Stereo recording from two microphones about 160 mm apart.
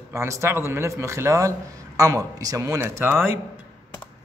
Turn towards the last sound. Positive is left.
turn(degrees=-15)  # may be behind; listen again after turning